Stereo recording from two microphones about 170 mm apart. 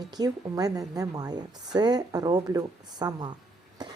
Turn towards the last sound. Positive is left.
turn(degrees=-25)  # may be behind; listen again after turning